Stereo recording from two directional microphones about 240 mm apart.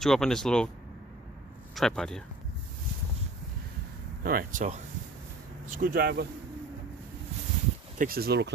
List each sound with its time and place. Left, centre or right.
0.0 s speech: centre
1.7 s speech: centre
4.2 s speech: right
7.9 s speech: right